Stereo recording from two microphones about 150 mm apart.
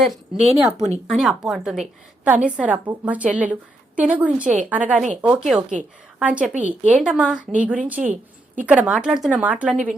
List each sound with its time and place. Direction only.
0.3 s speech: 45° right (ahead or behind)
1.1 s a woman's voice: centre (ahead or behind)